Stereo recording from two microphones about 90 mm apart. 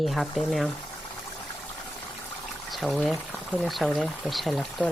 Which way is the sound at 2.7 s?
Centre (ahead or behind).